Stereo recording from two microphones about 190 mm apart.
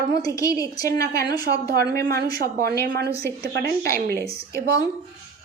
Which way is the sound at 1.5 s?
55° right (ahead or behind).